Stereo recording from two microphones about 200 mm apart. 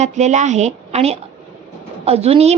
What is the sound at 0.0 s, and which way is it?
A woman's voice, 35° right (ahead or behind).